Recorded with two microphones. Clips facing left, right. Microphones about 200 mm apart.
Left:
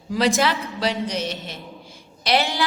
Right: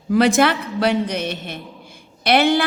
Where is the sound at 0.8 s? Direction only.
55° right (ahead or behind).